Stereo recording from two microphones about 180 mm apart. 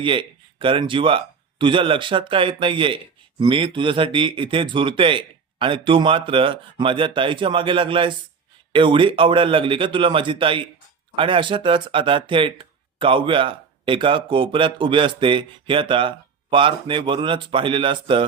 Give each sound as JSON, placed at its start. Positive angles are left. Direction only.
{"t": 0.0, "sound": "speech", "side_deg": -30}